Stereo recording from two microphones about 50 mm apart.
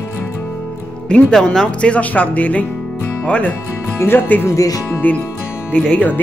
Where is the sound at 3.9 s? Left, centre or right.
Left.